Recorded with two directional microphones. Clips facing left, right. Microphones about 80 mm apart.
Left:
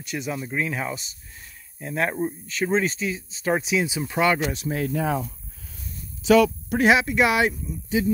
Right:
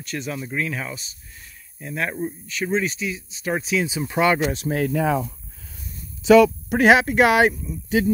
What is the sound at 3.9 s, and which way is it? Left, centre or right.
Speech, centre.